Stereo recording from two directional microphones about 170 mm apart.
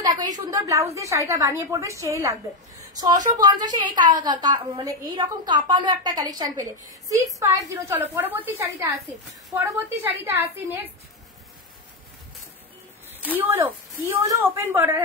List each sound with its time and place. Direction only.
0.0 s a sound: 20° right (ahead or behind)
0.5 s a woman's voice: 20° right (ahead or behind)
13.4 s a woman's voice: 10° right (ahead or behind)